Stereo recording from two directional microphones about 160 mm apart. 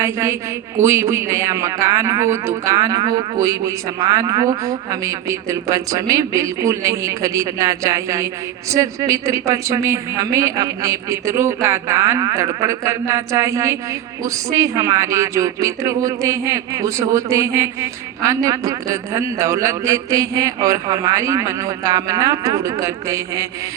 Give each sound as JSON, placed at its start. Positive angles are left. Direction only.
{"t": 0.0, "sound": "a woman's voice", "side_deg": -15}